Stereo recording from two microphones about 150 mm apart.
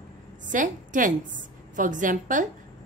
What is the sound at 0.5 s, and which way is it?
A woman's voice, 60° right (ahead or behind).